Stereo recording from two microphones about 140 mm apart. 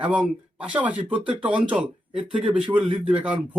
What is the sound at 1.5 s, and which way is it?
Speech, 35° right (ahead or behind).